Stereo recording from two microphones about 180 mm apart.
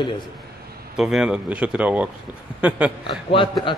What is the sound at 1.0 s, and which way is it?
Speech, 5° right (ahead or behind).